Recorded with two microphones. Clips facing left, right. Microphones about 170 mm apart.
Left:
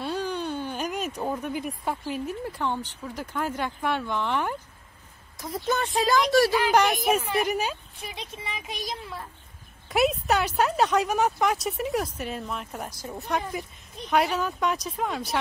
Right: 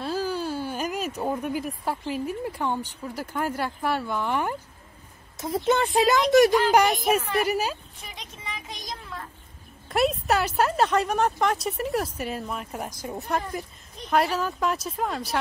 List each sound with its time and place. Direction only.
0.0 s speech: 5° right (ahead or behind)
5.4 s speech: 25° right (ahead or behind)
6.9 s a woman's voice: 5° left (ahead or behind)
7.4 s speech: 5° right (ahead or behind)
8.5 s a woman's voice: 10° left (ahead or behind)
9.8 s speech: centre (ahead or behind)